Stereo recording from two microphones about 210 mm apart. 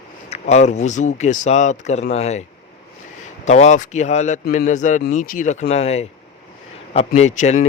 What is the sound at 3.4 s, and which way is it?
A man's voice, 35° left (ahead or behind).